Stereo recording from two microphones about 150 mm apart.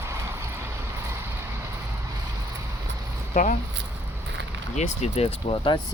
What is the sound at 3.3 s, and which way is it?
Speech, 60° left (ahead or behind).